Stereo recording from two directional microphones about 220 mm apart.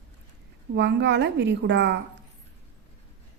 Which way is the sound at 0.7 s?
55° right (ahead or behind).